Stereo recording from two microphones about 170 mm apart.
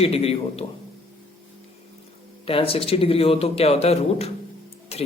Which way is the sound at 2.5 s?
35° left (ahead or behind).